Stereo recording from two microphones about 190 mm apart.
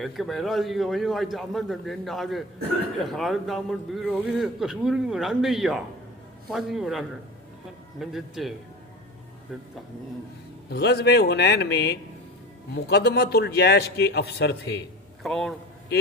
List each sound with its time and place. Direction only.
0.0 s a man's voice: centre (ahead or behind)
10.7 s a man's voice: 60° left (ahead or behind)
15.2 s a man's voice: centre (ahead or behind)